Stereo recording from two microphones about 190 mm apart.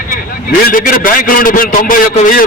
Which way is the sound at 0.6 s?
50° left (ahead or behind).